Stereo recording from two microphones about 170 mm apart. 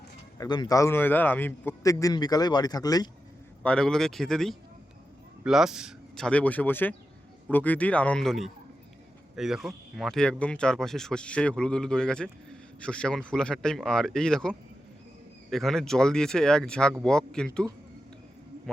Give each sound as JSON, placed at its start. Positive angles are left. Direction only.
{"t": 0.3, "sound": "a man's voice", "side_deg": 25}
{"t": 3.6, "sound": "speech", "side_deg": 5}